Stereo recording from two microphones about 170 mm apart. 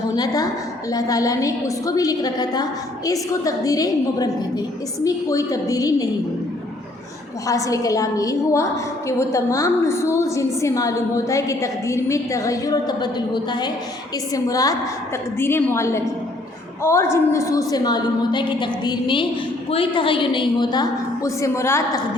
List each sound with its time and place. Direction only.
0.2 s a woman's voice: 20° left (ahead or behind)
7.4 s a woman's voice: 20° left (ahead or behind)